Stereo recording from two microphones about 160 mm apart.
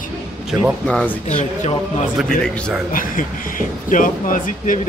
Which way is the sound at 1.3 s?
50° left (ahead or behind).